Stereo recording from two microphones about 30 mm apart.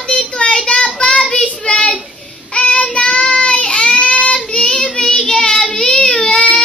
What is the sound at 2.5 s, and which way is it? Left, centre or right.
Child singing, left.